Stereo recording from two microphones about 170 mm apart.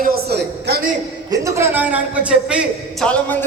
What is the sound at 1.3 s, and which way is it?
A man's voice, 15° right (ahead or behind).